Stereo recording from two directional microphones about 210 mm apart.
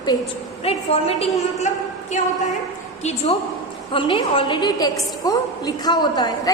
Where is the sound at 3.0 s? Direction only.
30° left (ahead or behind).